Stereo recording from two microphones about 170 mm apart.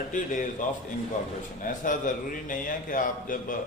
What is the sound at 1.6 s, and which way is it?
A man's voice, 55° left (ahead or behind).